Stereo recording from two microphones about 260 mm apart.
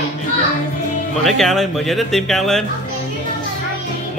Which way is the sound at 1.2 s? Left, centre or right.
Centre.